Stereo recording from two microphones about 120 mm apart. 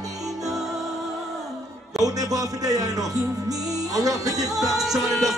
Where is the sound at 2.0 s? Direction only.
30° right (ahead or behind).